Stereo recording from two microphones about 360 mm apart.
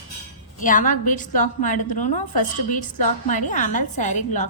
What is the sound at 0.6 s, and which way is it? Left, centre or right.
A woman's voice, left.